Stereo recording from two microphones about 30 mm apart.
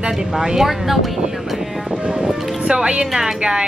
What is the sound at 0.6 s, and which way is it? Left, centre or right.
Speech, centre.